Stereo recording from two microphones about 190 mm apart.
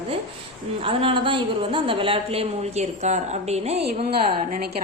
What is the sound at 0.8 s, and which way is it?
A woman's voice, 30° right (ahead or behind).